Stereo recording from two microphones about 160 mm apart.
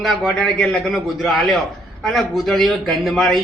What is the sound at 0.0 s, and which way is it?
A man's voice, centre (ahead or behind).